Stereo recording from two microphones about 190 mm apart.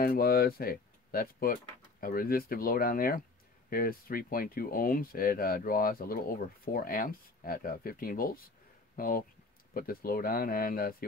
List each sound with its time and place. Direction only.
0.0 s speech: 50° left (ahead or behind)